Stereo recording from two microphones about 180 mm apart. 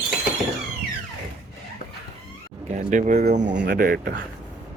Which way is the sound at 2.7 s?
45° right (ahead or behind).